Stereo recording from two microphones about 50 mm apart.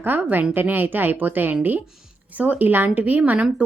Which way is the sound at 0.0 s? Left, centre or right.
Right.